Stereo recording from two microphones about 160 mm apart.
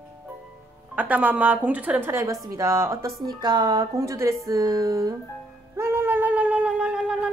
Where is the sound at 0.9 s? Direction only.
10° right (ahead or behind).